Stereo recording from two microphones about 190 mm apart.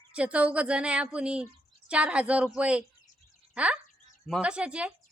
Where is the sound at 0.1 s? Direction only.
5° right (ahead or behind).